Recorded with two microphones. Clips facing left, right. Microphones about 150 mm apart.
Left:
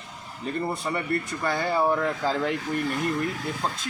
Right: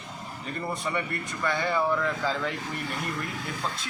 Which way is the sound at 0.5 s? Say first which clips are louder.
Left 2 dB; 35° left (ahead or behind).